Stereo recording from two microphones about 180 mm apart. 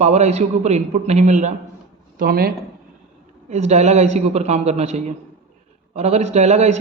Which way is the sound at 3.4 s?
40° right (ahead or behind).